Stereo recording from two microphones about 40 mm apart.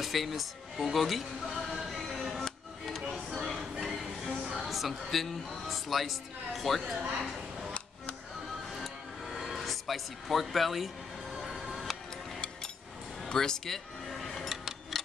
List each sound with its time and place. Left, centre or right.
0.0 s music: centre
3.3 s a sound: centre
4.5 s speech: centre
7.0 s a woman's voice: right
8.7 s a sound: centre
11.6 s music: centre
13.3 s music: centre